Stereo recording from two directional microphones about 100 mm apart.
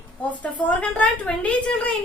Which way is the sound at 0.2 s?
15° left (ahead or behind).